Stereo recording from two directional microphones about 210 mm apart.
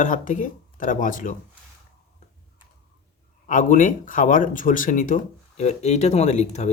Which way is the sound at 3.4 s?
40° left (ahead or behind).